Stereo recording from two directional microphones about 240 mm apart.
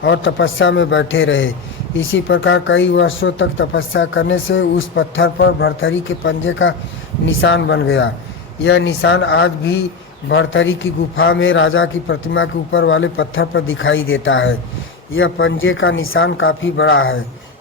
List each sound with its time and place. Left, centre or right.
0.0 s speech: left